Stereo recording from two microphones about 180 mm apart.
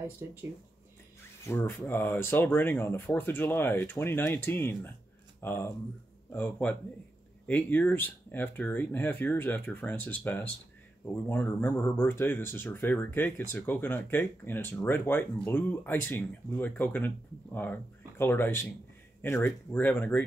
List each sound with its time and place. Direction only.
0.2 s speech: 15° right (ahead or behind)
1.4 s speech: 15° left (ahead or behind)